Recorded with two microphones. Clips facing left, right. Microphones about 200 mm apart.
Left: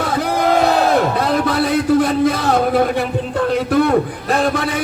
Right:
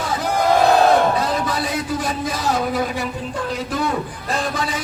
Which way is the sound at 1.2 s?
65° left (ahead or behind).